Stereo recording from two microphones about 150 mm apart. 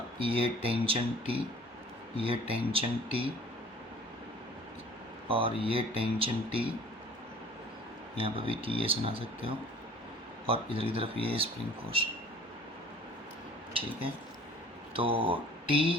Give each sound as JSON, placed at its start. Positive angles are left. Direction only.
{"t": 0.2, "sound": "speech", "side_deg": -35}
{"t": 5.3, "sound": "speech", "side_deg": -35}
{"t": 8.1, "sound": "speech", "side_deg": -35}
{"t": 14.9, "sound": "speech", "side_deg": -35}